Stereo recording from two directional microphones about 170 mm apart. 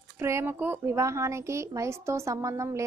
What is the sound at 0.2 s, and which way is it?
A woman's voice, 15° right (ahead or behind).